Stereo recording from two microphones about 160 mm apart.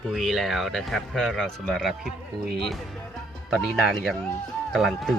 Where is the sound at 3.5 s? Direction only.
Centre (ahead or behind).